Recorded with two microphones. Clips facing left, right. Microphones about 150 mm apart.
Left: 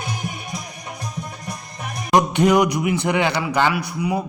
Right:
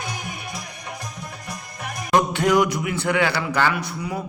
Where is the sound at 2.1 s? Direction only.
15° left (ahead or behind).